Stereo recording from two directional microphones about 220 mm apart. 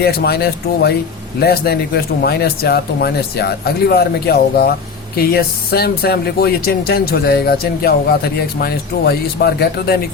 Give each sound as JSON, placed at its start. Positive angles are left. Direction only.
{"t": 0.0, "sound": "speech", "side_deg": 45}